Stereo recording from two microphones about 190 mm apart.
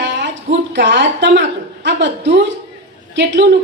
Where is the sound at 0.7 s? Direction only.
65° right (ahead or behind).